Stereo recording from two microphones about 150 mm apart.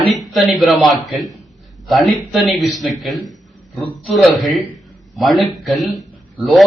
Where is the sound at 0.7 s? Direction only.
Centre (ahead or behind).